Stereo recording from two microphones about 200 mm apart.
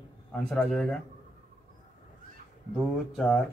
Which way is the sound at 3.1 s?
Centre (ahead or behind).